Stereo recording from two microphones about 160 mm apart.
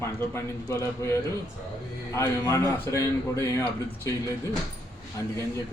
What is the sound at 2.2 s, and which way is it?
Speech, 20° left (ahead or behind).